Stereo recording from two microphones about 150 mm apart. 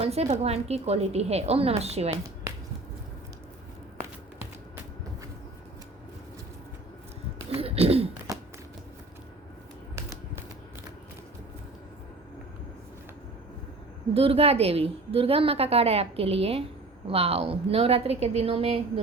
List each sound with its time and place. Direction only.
0.0 s a woman's voice: 45° right (ahead or behind)
7.6 s a sound: 40° right (ahead or behind)
9.9 s typewriter: 20° right (ahead or behind)
14.1 s a woman's voice: 40° right (ahead or behind)